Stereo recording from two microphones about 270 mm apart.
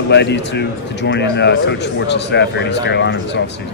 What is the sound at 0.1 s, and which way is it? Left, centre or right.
A man's voice, left.